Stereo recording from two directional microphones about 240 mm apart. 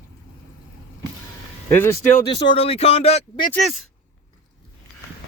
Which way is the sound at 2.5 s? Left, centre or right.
Left.